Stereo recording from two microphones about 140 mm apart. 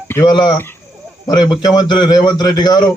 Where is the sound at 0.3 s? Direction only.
35° left (ahead or behind).